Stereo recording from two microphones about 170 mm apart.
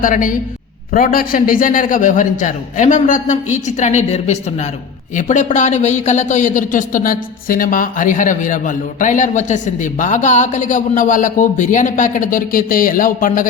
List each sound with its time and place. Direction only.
0.0 s speech: 50° left (ahead or behind)